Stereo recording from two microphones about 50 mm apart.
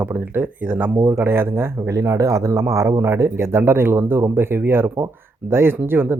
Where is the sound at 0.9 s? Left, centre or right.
Right.